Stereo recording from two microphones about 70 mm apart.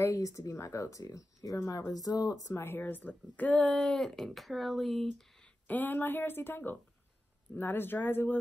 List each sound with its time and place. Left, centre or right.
0.0 s speech: left
2.6 s speech: left
3.8 s speech: centre
5.7 s speech: left